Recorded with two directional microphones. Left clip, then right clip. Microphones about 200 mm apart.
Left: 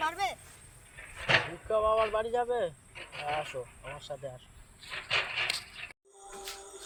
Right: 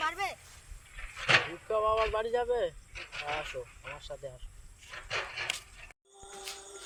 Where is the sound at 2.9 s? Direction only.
55° right (ahead or behind).